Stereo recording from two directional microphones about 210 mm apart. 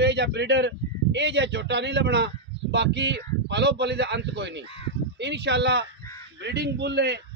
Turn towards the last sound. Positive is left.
turn(degrees=-55)  # may be behind; listen again after turning